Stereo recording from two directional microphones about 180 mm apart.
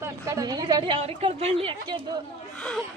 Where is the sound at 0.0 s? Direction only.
20° right (ahead or behind).